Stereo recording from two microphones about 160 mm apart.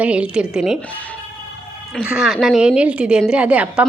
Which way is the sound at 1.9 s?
5° right (ahead or behind).